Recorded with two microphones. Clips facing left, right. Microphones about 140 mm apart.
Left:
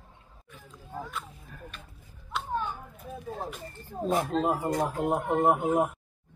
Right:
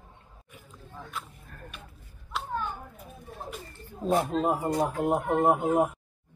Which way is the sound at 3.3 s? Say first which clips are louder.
Left 7 dB; 90° left.